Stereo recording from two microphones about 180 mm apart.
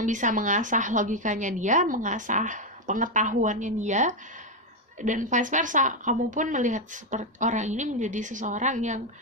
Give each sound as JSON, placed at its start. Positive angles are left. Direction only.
{"t": 0.0, "sound": "a woman's voice", "side_deg": -45}